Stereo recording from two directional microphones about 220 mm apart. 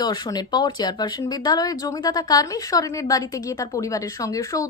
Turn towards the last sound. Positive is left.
turn(degrees=15)  # may be behind; listen again after turning